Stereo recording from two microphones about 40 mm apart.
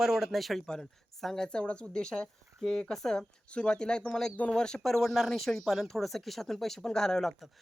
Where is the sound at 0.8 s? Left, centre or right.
Centre.